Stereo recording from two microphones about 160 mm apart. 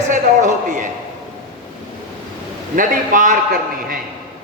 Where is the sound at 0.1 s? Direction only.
50° right (ahead or behind).